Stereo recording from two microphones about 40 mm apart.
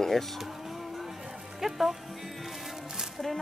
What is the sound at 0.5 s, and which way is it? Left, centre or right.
Music, centre.